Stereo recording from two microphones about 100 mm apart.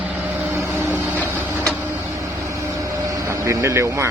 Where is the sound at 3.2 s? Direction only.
30° right (ahead or behind).